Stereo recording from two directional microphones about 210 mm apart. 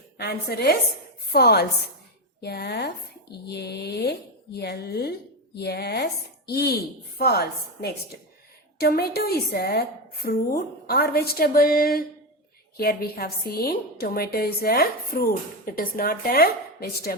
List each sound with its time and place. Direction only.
0.2 s a woman's voice: 50° left (ahead or behind)